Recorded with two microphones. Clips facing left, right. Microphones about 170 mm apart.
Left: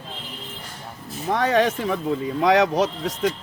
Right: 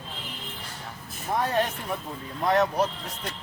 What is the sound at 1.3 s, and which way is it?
Speech, 90° left.